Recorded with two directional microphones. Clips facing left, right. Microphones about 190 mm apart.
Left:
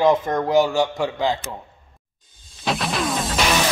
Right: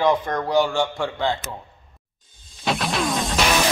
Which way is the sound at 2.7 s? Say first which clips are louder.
Even; centre (ahead or behind).